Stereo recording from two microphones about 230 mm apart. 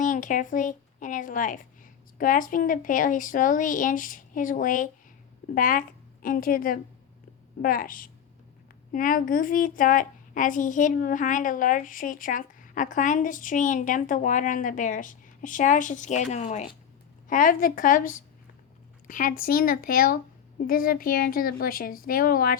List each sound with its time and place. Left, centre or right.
0.0 s a woman's voice: left